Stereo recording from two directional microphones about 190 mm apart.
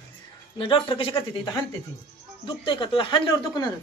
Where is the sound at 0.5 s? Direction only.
25° left (ahead or behind).